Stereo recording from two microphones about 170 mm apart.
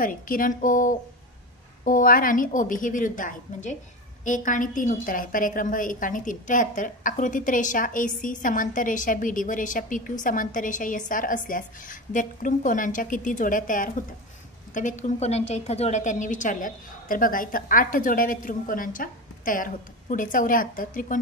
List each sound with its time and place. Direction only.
0.0 s a woman's voice: 55° left (ahead or behind)